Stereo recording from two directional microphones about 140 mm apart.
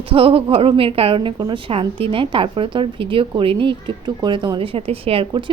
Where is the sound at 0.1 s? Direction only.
40° right (ahead or behind).